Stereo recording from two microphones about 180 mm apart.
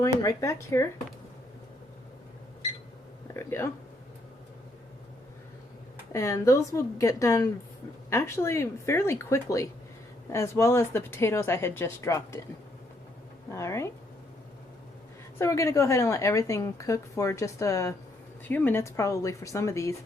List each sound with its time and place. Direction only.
0.0 s a woman's voice: 20° left (ahead or behind)
3.3 s a woman's voice: 15° left (ahead or behind)
6.1 s a woman's voice: 15° left (ahead or behind)
13.5 s a woman's voice: 15° left (ahead or behind)
15.4 s a woman's voice: 15° left (ahead or behind)